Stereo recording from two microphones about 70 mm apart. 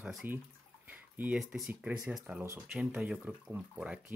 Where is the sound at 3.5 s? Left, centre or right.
Right.